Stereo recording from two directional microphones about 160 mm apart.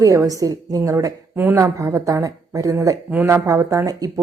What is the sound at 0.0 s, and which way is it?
Speech, 20° right (ahead or behind).